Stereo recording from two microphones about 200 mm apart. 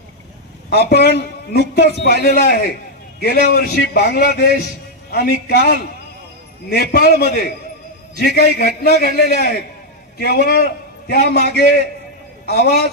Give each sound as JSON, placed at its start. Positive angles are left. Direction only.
{"t": 0.7, "sound": "a man's voice", "side_deg": 55}
{"t": 8.8, "sound": "a man's voice", "side_deg": 50}